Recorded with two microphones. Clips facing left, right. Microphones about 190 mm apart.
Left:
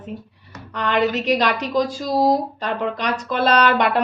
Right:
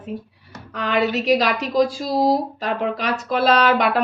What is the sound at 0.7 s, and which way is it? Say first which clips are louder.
A woman's voice: left 1 dB; 5° right (ahead or behind).